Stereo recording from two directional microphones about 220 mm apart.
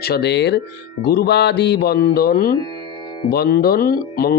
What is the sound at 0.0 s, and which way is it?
A man's voice, 45° left (ahead or behind).